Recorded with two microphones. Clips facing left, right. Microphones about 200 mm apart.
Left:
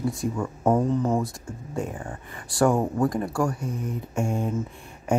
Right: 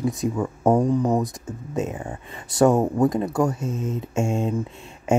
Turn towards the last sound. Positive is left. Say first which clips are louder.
# right 3 dB
turn(degrees=-25)  # may be behind; listen again after turning